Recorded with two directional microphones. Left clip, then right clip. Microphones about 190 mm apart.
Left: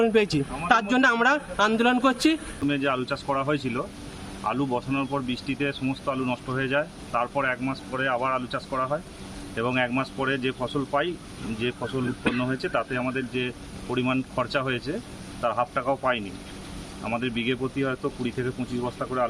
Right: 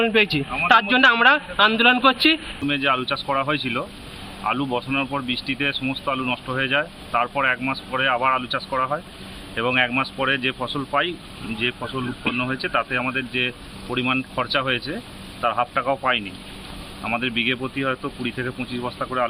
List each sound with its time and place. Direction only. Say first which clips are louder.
0.0 s a man's voice: right 3 dB; 15° left (ahead or behind)